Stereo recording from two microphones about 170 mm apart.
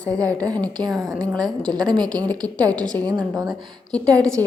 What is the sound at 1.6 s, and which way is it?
Speech, 25° right (ahead or behind).